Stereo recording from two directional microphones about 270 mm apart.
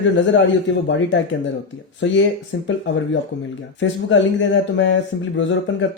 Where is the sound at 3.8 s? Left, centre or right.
Left.